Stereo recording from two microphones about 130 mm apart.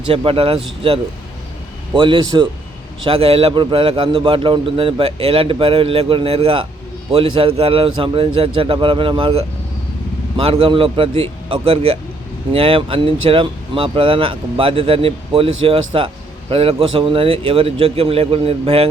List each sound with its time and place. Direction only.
0.2 s a man's voice: 45° right (ahead or behind)
2.0 s a man's voice: 35° right (ahead or behind)
3.1 s a man's voice: 50° right (ahead or behind)